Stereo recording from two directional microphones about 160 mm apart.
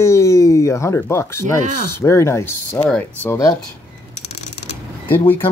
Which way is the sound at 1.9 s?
15° left (ahead or behind).